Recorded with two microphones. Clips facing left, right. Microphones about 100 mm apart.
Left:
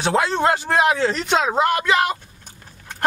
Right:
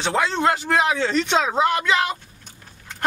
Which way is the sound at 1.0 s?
5° left (ahead or behind).